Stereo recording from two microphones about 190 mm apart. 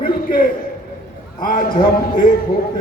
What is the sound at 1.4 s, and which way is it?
Speech, 45° left (ahead or behind).